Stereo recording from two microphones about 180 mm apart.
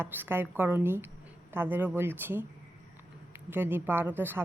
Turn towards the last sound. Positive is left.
turn(degrees=-10)  # may be behind; listen again after turning